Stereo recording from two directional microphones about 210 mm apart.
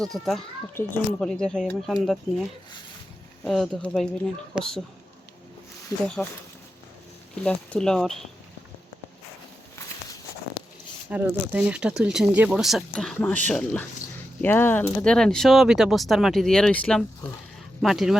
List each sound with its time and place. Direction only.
0.0 s speech: centre (ahead or behind)
5.9 s speech: 15° left (ahead or behind)
7.4 s speech: 5° left (ahead or behind)
11.1 s speech: 5° right (ahead or behind)